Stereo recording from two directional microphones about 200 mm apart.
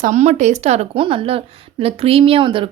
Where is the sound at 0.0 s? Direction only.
35° right (ahead or behind).